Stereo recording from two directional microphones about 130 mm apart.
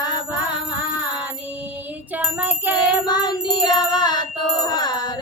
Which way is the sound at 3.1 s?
35° left (ahead or behind).